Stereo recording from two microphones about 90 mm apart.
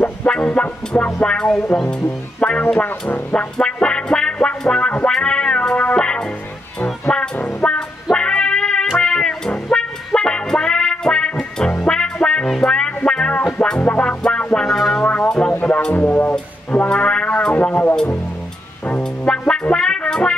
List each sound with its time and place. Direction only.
0.0 s music: 15° left (ahead or behind)